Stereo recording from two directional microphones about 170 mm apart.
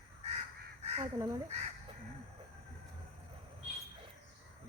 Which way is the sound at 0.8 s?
40° right (ahead or behind).